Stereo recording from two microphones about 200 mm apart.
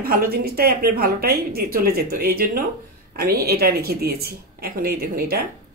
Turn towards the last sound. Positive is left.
turn(degrees=-50)  # may be behind; listen again after turning